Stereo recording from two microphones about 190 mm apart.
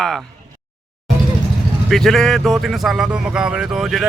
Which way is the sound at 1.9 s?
Centre (ahead or behind).